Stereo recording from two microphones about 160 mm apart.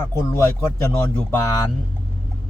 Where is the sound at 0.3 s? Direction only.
20° left (ahead or behind).